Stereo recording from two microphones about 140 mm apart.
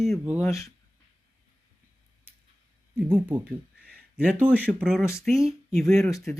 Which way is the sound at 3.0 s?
15° right (ahead or behind).